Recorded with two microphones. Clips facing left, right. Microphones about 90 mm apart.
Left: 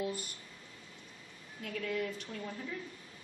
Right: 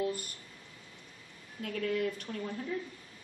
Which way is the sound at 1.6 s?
45° right (ahead or behind).